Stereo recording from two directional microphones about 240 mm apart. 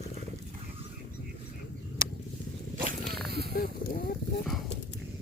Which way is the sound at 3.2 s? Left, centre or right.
Right.